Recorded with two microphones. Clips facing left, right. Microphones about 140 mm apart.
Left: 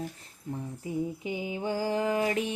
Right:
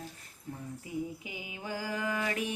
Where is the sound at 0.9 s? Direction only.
30° left (ahead or behind).